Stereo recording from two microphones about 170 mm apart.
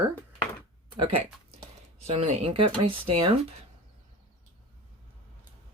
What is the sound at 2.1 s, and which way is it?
Speech, 35° right (ahead or behind).